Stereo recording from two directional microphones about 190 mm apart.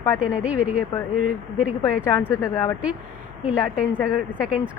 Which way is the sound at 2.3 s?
15° left (ahead or behind).